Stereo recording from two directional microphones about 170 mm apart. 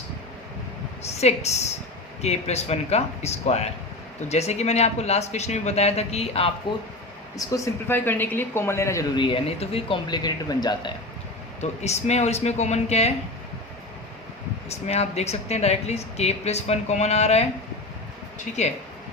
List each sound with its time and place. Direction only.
1.0 s a woman's voice: 40° left (ahead or behind)
7.3 s speech: 20° left (ahead or behind)
11.6 s speech: 40° left (ahead or behind)
14.7 s speech: 40° left (ahead or behind)